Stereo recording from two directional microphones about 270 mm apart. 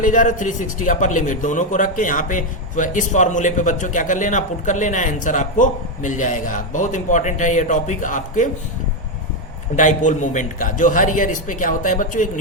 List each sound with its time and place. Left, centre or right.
0.0 s a man's voice: left
9.7 s a man's voice: left